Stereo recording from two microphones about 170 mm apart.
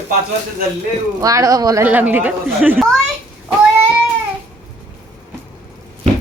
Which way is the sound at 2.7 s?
Centre (ahead or behind).